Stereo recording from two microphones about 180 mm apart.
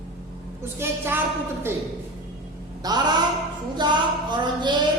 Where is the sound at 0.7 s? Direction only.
15° right (ahead or behind).